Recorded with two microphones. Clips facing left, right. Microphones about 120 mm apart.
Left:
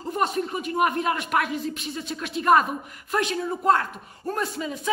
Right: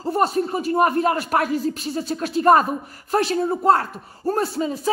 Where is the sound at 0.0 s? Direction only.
35° right (ahead or behind).